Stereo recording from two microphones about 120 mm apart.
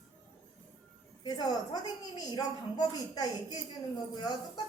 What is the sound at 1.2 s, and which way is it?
A woman's voice, 35° left (ahead or behind).